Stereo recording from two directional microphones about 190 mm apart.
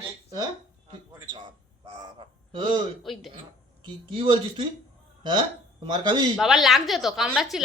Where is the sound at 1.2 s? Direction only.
20° right (ahead or behind).